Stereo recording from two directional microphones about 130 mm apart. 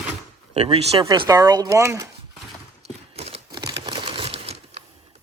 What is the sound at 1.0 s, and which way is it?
Speech, 30° right (ahead or behind).